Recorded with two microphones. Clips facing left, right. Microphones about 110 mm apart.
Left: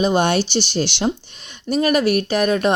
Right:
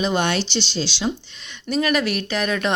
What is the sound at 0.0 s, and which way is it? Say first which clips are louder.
A woman's voice: left 4 dB; 40° left (ahead or behind).